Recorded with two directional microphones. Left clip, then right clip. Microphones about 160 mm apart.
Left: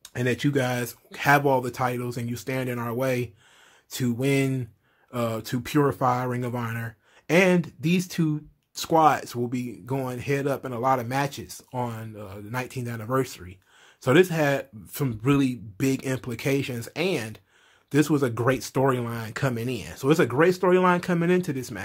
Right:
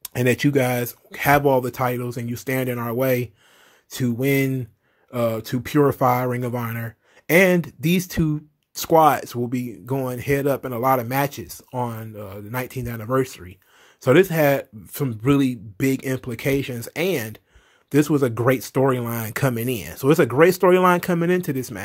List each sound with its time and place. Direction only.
0.0 s speech: 40° right (ahead or behind)
19.1 s speech: 45° right (ahead or behind)